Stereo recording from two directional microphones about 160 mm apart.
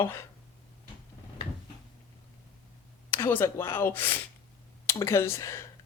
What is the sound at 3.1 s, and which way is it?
Speech, 15° left (ahead or behind).